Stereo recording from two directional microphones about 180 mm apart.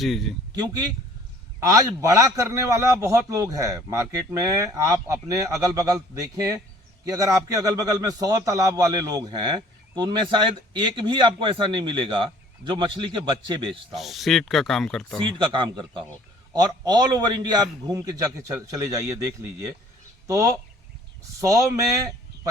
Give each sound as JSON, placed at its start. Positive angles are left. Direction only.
{"t": 0.0, "sound": "speech", "side_deg": 0}
{"t": 0.5, "sound": "a man's voice", "side_deg": -20}
{"t": 13.9, "sound": "speech", "side_deg": 0}
{"t": 15.4, "sound": "a man's voice", "side_deg": -25}
{"t": 20.2, "sound": "a man's voice", "side_deg": -15}